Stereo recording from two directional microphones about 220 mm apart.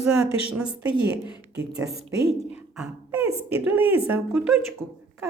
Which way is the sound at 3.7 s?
10° right (ahead or behind).